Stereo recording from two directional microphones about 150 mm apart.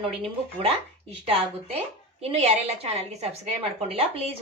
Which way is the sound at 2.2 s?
45° right (ahead or behind).